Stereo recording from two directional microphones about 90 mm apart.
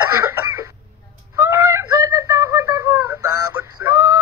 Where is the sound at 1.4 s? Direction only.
30° right (ahead or behind).